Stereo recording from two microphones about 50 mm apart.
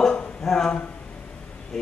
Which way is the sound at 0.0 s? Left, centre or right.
Centre.